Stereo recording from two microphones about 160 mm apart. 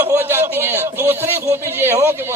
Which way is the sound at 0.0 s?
15° right (ahead or behind).